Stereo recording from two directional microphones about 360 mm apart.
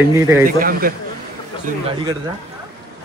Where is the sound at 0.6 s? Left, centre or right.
Right.